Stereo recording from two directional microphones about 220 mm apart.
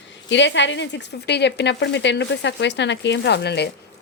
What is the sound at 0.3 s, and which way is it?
Speech, 55° left (ahead or behind).